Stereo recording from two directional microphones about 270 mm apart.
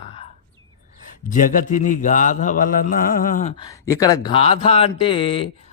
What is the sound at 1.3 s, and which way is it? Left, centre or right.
Mantra, left.